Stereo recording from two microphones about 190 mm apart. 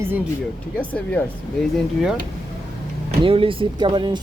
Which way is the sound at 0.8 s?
5° left (ahead or behind).